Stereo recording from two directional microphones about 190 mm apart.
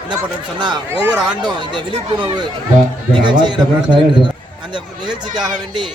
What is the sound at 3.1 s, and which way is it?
A man's voice, 25° right (ahead or behind).